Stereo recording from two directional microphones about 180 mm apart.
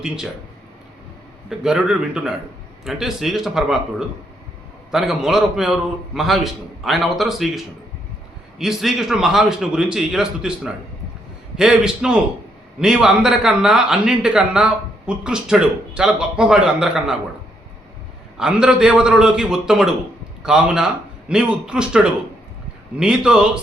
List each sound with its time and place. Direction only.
1.5 s a man's voice: 5° right (ahead or behind)
18.3 s a man's voice: 5° right (ahead or behind)